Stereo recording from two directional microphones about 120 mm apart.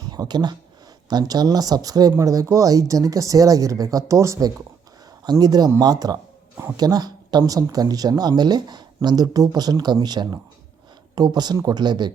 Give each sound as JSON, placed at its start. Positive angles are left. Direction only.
{"t": 0.1, "sound": "speech", "side_deg": -35}